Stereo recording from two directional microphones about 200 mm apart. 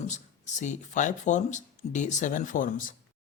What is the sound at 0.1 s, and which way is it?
Speech, 35° left (ahead or behind).